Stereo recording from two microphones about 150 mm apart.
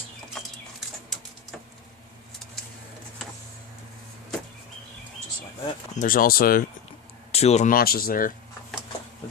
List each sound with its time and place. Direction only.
6.0 s speech: 70° left (ahead or behind)
7.3 s speech: 45° left (ahead or behind)
7.7 s speech: 80° left